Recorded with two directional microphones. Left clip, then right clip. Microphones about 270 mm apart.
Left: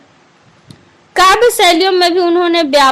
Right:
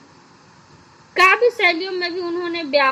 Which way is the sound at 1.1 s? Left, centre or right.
Left.